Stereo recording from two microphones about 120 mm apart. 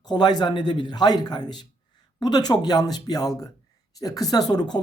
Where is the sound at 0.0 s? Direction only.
35° left (ahead or behind).